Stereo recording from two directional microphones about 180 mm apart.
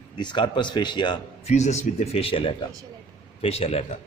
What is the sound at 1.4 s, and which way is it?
Speech, 40° left (ahead or behind).